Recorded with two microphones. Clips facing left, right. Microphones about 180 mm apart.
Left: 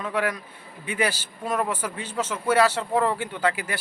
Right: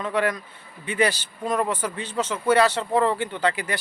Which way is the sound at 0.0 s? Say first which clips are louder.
Right 2 dB; 5° left (ahead or behind).